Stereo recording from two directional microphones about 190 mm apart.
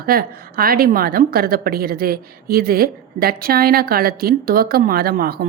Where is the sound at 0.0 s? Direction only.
50° right (ahead or behind).